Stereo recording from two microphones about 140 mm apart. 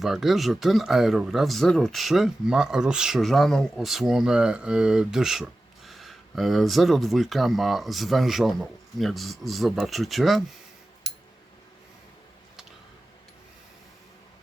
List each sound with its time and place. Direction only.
0.0 s speech: centre (ahead or behind)